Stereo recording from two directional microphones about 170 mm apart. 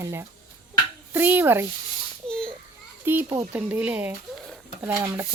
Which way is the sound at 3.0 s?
10° right (ahead or behind).